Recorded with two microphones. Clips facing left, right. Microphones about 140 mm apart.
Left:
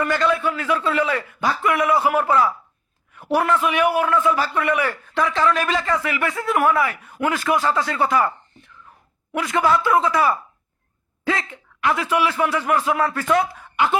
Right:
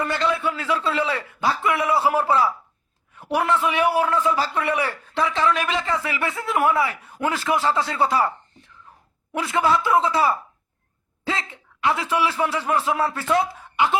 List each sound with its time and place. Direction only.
0.0 s a man's voice: 20° right (ahead or behind)
9.3 s a man's voice: 25° right (ahead or behind)
13.7 s laughter: 20° right (ahead or behind)